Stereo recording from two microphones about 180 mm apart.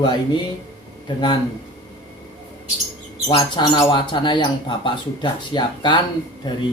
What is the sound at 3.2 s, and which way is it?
Speech, 25° left (ahead or behind).